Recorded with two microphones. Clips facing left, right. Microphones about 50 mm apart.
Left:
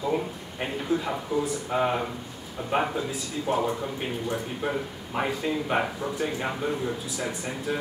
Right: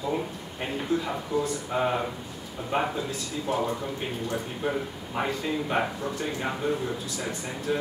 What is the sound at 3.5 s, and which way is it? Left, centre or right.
Speech, left.